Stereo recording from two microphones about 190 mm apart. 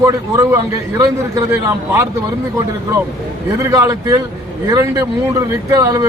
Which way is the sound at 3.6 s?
15° right (ahead or behind).